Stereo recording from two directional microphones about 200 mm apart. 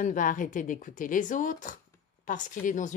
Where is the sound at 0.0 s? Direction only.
40° left (ahead or behind).